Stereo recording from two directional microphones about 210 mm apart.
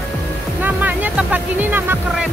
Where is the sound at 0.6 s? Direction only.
10° right (ahead or behind).